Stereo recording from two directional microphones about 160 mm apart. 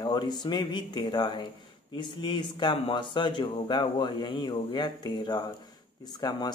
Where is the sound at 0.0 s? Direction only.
25° left (ahead or behind).